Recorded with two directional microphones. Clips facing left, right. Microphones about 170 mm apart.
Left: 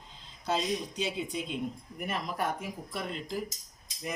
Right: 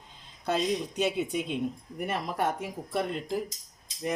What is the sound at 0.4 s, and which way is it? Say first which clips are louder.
Speech: right 3 dB; 60° right (ahead or behind).